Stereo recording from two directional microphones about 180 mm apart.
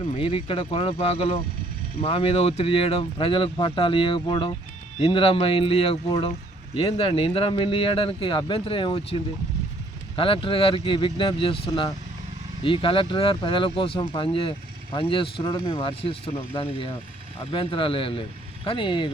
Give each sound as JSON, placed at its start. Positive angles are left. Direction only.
{"t": 0.2, "sound": "speech", "side_deg": 30}
{"t": 17.5, "sound": "speech", "side_deg": 30}